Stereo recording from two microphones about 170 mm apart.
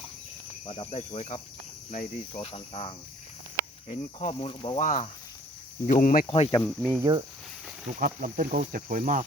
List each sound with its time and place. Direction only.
0.6 s cricket: 30° left (ahead or behind)
4.8 s speech: 50° left (ahead or behind)
6.2 s cricket: 35° left (ahead or behind)
6.7 s speech: 5° right (ahead or behind)
7.0 s speech: 25° right (ahead or behind)
7.9 s speech: 50° right (ahead or behind)